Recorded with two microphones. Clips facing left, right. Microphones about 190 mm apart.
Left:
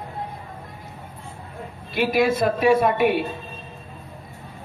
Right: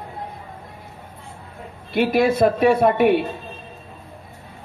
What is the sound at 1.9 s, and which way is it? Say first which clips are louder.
A man's voice: right 2 dB; 55° right (ahead or behind).